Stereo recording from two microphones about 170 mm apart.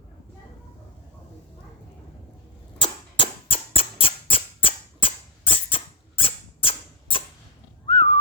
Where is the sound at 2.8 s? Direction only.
30° left (ahead or behind).